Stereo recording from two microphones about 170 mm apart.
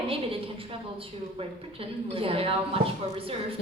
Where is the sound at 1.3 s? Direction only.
35° right (ahead or behind).